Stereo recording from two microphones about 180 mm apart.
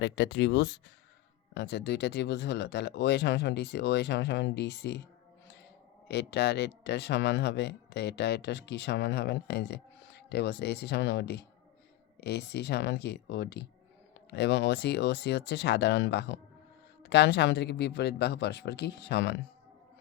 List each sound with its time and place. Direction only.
0.0 s speech: 75° left (ahead or behind)
6.1 s speech: 70° left (ahead or behind)